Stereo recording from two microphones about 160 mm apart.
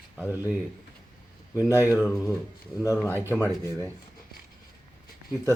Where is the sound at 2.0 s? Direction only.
15° left (ahead or behind).